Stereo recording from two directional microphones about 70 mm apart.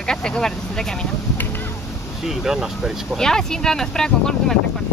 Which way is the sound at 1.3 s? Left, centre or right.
Left.